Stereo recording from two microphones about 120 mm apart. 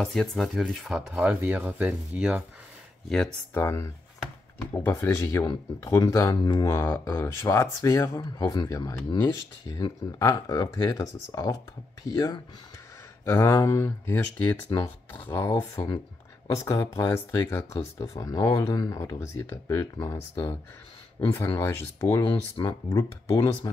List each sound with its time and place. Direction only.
0.0 s speech: 5° left (ahead or behind)
3.5 s speech: 20° left (ahead or behind)
13.2 s speech: 25° left (ahead or behind)
15.4 s speech: 30° left (ahead or behind)
21.3 s speech: 20° left (ahead or behind)
22.7 s speech: 30° left (ahead or behind)